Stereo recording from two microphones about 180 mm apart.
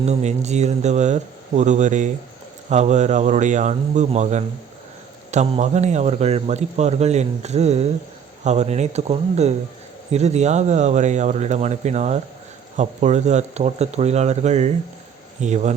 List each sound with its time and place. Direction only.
0.0 s a man's voice: 40° right (ahead or behind)